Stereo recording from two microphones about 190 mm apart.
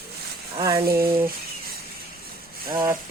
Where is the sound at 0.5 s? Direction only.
20° right (ahead or behind).